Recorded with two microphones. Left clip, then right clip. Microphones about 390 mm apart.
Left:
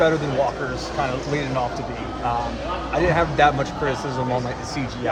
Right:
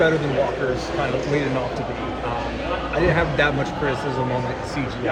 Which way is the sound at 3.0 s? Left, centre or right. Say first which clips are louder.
Left 2 dB; centre.